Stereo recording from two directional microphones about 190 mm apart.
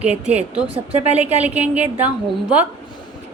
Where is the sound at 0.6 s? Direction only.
30° right (ahead or behind).